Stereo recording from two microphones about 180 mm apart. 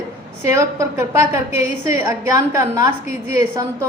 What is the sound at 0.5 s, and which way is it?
Speech, 15° right (ahead or behind).